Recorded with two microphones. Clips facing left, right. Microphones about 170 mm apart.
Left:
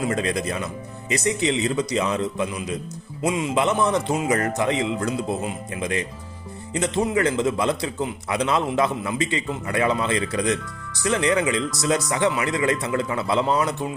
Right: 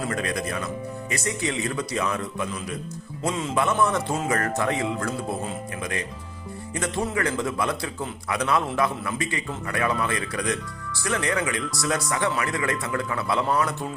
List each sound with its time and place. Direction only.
0.0 s a man's voice: 25° left (ahead or behind)